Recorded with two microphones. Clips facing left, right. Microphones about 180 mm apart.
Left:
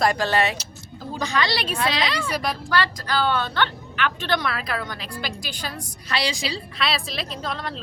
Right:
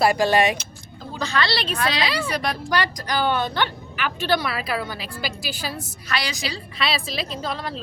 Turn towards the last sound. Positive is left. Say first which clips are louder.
# right 1 dB
turn(degrees=0)  # may be behind; listen again after turning